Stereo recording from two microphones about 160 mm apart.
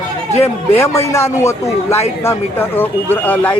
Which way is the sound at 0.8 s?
15° left (ahead or behind).